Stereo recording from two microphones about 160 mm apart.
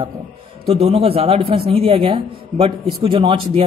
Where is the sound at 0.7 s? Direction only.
40° right (ahead or behind).